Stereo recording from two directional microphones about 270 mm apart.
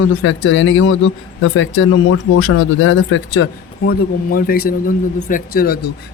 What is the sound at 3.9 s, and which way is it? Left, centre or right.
Speech, left.